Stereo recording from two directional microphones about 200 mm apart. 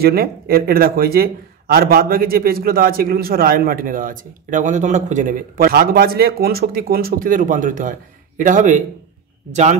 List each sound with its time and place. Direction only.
0.0 s a man's voice: 50° right (ahead or behind)